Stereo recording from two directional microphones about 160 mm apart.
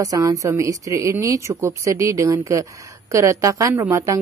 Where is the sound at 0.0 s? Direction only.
20° right (ahead or behind).